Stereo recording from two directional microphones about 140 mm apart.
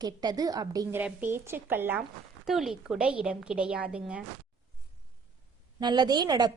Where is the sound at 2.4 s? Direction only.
Centre (ahead or behind).